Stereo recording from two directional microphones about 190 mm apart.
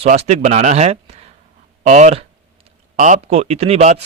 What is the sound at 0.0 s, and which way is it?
Speech, 35° right (ahead or behind).